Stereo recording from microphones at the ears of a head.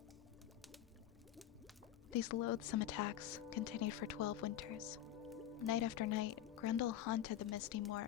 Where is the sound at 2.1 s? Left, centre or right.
Left.